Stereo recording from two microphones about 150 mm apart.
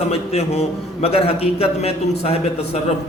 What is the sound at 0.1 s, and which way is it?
A man's voice, 45° left (ahead or behind).